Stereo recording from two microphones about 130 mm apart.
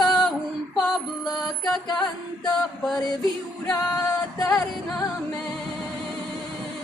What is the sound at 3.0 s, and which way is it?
Music, 30° left (ahead or behind).